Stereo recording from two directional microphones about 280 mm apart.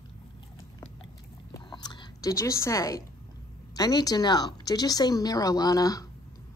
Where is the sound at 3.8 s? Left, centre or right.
Centre.